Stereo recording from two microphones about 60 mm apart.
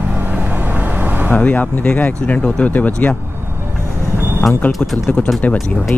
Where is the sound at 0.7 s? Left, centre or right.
Right.